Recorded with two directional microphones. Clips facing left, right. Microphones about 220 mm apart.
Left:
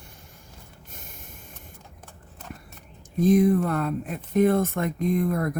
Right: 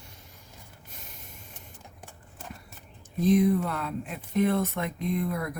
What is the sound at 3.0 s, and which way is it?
Speech, 45° left (ahead or behind).